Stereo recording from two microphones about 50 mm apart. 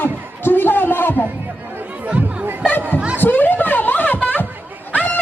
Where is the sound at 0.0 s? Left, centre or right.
Left.